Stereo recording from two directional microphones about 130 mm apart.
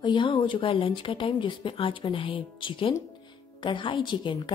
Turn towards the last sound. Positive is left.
turn(degrees=40)  # may be behind; listen again after turning